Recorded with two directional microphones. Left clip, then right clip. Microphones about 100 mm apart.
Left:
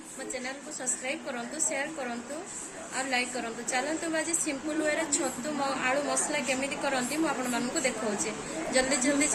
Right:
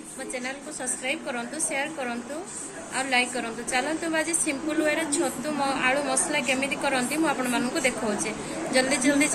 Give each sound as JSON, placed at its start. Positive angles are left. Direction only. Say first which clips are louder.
{"t": 1.0, "sound": "a woman's voice", "louder": "right 7 dB", "side_deg": 20}